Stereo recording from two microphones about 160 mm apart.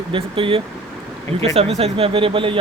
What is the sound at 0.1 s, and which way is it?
Speech, 35° right (ahead or behind).